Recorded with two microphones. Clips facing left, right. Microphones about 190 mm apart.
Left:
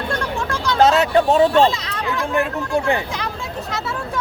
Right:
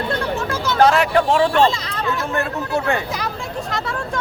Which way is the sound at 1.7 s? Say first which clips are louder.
Right 1 dB; centre (ahead or behind).